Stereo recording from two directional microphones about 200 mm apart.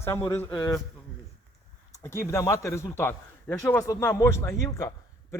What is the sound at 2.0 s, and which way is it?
A man's voice, 15° left (ahead or behind).